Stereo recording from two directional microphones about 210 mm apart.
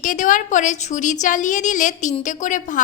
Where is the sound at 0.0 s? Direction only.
40° left (ahead or behind).